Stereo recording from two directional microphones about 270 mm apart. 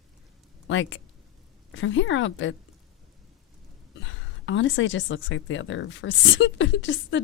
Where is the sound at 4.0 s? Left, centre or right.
Left.